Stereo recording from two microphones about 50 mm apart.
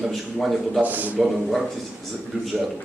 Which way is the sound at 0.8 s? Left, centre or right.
Right.